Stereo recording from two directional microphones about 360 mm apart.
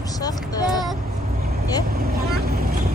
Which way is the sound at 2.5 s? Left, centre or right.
Right.